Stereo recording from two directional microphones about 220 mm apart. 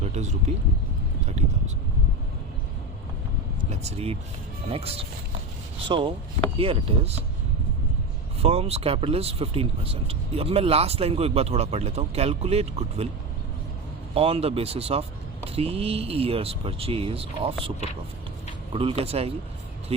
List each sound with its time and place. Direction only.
0.0 s speech: 30° right (ahead or behind)
1.4 s vehicle: 30° right (ahead or behind)
3.6 s speech: 30° right (ahead or behind)
8.4 s speech: 25° right (ahead or behind)
14.1 s speech: 25° right (ahead or behind)